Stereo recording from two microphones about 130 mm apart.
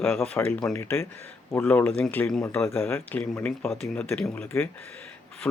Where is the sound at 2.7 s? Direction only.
20° left (ahead or behind).